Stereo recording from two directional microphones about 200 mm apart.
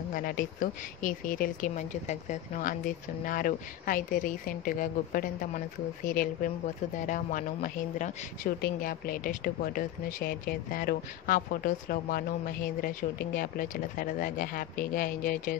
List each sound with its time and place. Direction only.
0.1 s a woman's voice: 45° left (ahead or behind)